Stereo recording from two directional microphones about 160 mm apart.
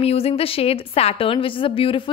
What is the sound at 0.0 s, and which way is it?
A woman's voice, 40° left (ahead or behind).